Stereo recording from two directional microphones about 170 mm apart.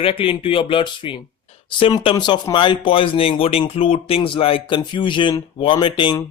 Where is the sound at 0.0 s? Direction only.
30° left (ahead or behind).